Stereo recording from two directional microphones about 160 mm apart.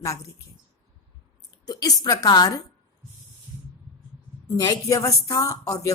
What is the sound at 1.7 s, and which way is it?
Speech, 25° left (ahead or behind).